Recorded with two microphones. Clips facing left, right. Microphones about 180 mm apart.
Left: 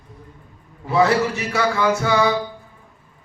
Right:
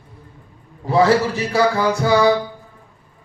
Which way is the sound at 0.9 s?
35° right (ahead or behind).